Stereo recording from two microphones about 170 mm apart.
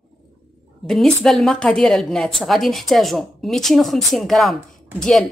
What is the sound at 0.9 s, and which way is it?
A woman's voice, centre (ahead or behind).